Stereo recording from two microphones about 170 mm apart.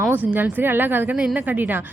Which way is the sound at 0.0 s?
10° right (ahead or behind).